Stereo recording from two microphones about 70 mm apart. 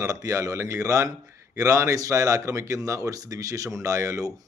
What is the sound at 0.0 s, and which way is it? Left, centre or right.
A man's voice, right.